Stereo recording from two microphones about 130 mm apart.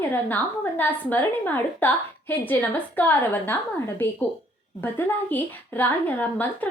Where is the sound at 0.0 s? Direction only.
15° left (ahead or behind).